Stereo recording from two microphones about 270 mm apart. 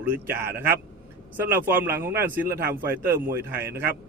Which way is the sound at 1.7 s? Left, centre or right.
Centre.